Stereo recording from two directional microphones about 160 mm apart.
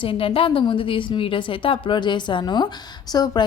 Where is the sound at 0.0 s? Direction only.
35° left (ahead or behind).